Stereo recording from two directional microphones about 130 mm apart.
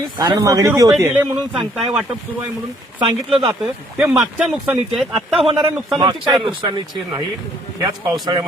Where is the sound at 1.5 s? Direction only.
5° right (ahead or behind).